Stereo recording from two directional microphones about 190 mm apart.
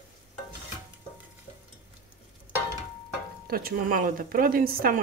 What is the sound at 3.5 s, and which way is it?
A woman's voice, 50° right (ahead or behind).